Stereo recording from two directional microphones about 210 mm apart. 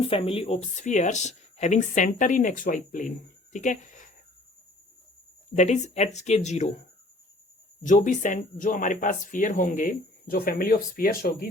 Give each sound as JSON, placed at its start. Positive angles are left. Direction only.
{"t": 0.0, "sound": "speech", "side_deg": 25}
{"t": 3.5, "sound": "a sound", "side_deg": 35}
{"t": 5.5, "sound": "speech", "side_deg": 35}
{"t": 7.8, "sound": "speech", "side_deg": 35}